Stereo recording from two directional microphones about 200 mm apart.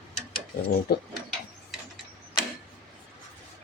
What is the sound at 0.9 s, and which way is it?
Speech, 50° left (ahead or behind).